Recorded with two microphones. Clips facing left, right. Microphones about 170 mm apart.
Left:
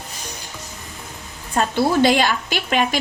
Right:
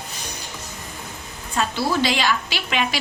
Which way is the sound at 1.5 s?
45° left (ahead or behind).